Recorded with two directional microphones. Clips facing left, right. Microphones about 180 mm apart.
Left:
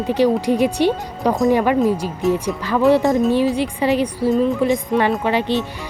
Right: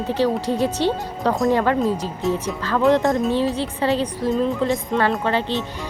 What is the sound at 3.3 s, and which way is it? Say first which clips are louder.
Speech: left 4 dB; 15° left (ahead or behind).